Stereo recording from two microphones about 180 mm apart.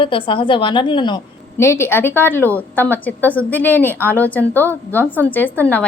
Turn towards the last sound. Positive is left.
turn(degrees=10)  # may be behind; listen again after turning